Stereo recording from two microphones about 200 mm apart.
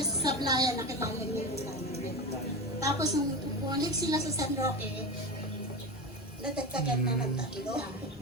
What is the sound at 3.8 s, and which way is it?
Speech, 20° right (ahead or behind).